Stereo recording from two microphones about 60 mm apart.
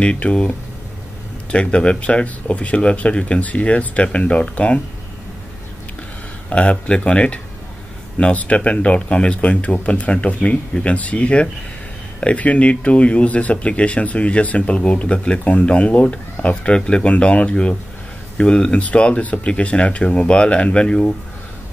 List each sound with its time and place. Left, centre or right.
0.0 s speech: centre
6.5 s speech: centre